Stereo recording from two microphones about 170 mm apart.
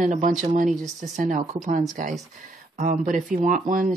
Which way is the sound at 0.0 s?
50° right (ahead or behind).